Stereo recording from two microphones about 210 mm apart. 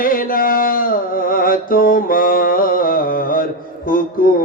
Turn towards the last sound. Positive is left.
turn(degrees=40)  # may be behind; listen again after turning